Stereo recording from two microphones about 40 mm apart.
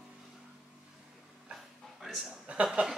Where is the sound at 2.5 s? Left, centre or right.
Right.